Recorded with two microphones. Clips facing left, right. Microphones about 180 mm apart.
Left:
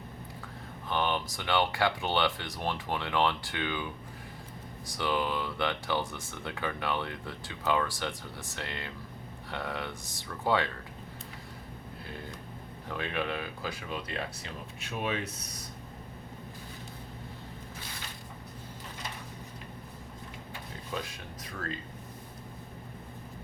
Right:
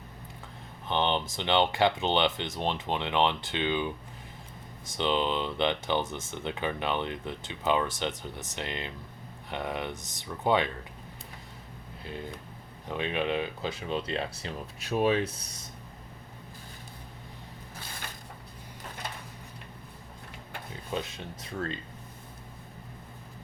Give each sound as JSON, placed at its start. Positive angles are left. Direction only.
{"t": 0.9, "sound": "speech", "side_deg": -25}
{"t": 12.9, "sound": "speech", "side_deg": -20}
{"t": 20.9, "sound": "speech", "side_deg": -25}